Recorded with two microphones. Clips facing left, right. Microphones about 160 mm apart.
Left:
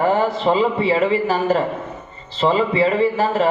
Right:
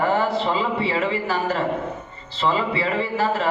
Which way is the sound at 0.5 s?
20° left (ahead or behind).